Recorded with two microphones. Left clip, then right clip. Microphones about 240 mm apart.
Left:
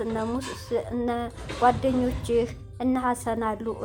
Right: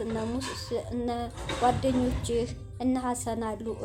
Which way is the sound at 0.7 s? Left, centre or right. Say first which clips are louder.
Left 5 dB; centre.